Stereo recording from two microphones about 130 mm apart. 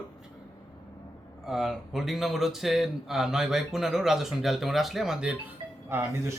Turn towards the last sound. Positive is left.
turn(degrees=-20)  # may be behind; listen again after turning